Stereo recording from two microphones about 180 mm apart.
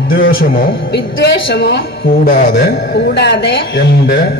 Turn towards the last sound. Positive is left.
turn(degrees=70)  # may be behind; listen again after turning